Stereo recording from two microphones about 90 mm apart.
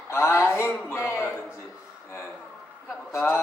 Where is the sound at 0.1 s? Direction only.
30° left (ahead or behind).